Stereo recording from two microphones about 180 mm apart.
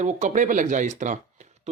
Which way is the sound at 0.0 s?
45° right (ahead or behind).